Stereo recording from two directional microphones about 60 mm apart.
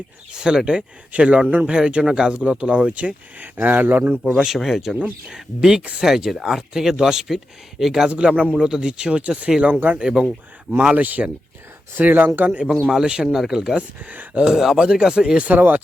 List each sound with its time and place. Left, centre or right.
0.3 s speech: centre; by 4.2 s right
4.4 s speech: centre
5.3 s speech: centre
10.2 s speech: right
12.5 s speech: centre
14.0 s speech: right
14.4 s speech: centre
15.4 s speech: right